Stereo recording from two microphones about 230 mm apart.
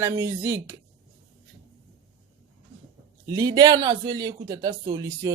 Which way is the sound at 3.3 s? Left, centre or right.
Centre.